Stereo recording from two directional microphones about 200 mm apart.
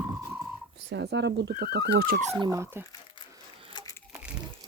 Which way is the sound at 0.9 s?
60° right (ahead or behind).